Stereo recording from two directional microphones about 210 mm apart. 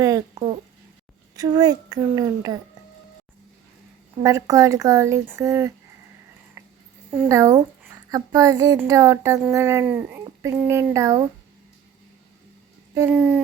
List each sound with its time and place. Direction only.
1.4 s speech: 20° right (ahead or behind)
4.2 s speech: 15° right (ahead or behind)
7.1 s speech: 10° right (ahead or behind)
12.9 s speech: 10° right (ahead or behind)